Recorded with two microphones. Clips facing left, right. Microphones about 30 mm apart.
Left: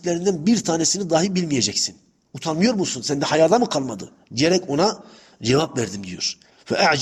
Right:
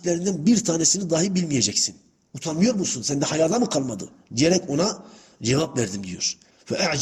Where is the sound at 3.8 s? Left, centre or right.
Centre.